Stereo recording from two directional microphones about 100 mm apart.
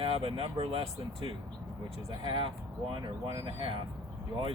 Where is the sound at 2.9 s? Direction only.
50° right (ahead or behind).